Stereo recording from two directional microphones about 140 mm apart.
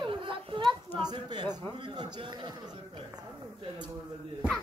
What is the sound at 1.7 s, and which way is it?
Speech, 35° right (ahead or behind).